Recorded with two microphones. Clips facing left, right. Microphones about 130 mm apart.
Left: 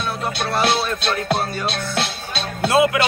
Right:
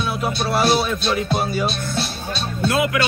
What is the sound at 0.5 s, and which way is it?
Music, 5° right (ahead or behind).